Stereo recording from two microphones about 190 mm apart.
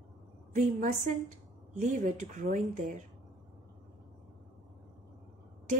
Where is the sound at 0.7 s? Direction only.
40° right (ahead or behind).